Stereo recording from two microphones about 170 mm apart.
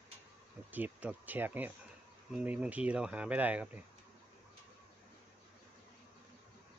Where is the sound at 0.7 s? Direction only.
10° right (ahead or behind).